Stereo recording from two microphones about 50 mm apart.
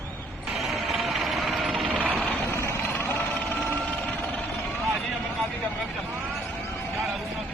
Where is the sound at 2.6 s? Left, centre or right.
Left.